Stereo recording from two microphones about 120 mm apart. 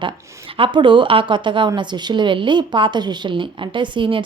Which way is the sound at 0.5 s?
45° right (ahead or behind).